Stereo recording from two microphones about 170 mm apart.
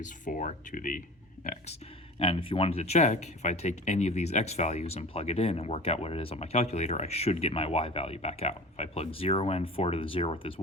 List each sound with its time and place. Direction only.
0.0 s speech: 50° left (ahead or behind)
2.1 s speech: 35° left (ahead or behind)